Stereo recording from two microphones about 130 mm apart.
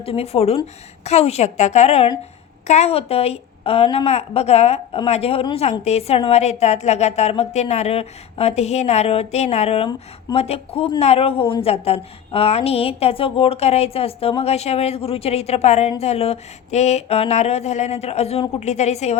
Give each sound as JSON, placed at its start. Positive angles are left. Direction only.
{"t": 0.0, "sound": "a woman's voice", "side_deg": 50}